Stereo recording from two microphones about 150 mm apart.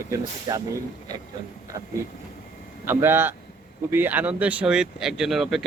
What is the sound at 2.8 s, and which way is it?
Speech, 15° right (ahead or behind).